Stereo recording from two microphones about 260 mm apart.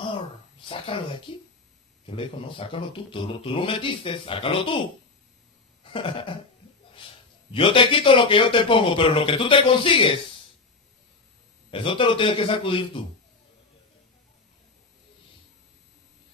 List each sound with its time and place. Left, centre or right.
0.7 s speech: left
5.9 s speech: centre
7.5 s speech: centre
11.7 s speech: centre